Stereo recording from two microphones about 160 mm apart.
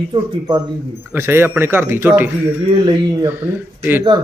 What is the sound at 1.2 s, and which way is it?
A man's voice, 15° right (ahead or behind).